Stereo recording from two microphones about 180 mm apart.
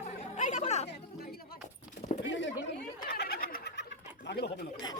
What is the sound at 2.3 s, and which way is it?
Speech, 85° left.